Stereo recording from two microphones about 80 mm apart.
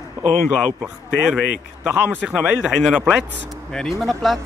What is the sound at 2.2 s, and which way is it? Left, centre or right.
Speech, centre.